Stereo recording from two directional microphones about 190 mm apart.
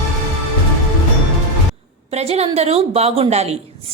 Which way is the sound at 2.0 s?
35° right (ahead or behind).